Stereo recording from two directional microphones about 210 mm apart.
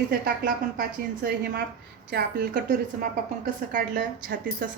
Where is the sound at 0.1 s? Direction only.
45° right (ahead or behind).